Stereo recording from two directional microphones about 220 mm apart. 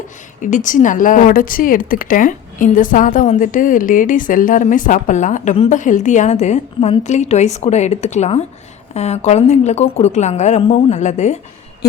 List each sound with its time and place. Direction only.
0.4 s speech: 35° left (ahead or behind)